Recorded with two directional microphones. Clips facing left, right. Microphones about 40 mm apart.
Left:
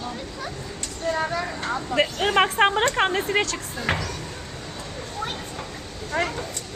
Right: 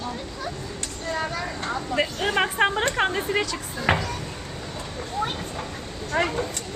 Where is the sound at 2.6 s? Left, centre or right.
Left.